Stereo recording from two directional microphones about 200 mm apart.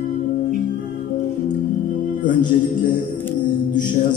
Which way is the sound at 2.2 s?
40° left (ahead or behind).